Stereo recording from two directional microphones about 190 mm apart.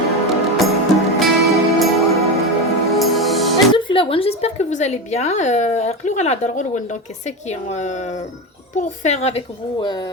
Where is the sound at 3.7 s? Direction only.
30° left (ahead or behind).